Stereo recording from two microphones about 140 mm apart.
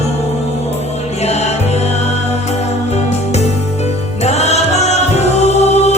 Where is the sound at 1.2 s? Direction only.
50° left (ahead or behind).